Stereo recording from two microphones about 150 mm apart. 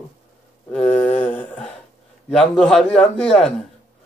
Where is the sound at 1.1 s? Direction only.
10° left (ahead or behind).